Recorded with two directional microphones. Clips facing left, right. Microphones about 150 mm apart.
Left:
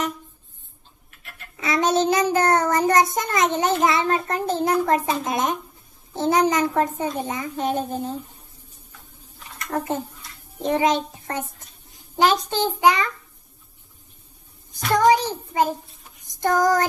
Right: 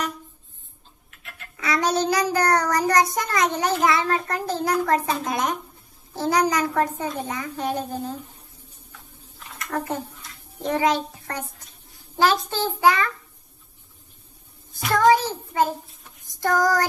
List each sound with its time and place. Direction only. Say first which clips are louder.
1.5 s child singing: left 2 dB; 25° left (ahead or behind)
9.6 s child singing: left 2 dB; 20° left (ahead or behind)
14.9 s a child's voice: even; 15° left (ahead or behind)
16.4 s child singing: left 2 dB; 20° left (ahead or behind)